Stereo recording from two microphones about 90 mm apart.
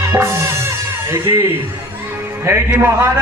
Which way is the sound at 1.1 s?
30° right (ahead or behind).